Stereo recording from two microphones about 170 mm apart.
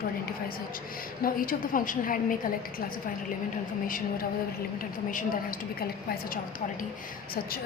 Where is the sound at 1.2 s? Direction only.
55° left (ahead or behind).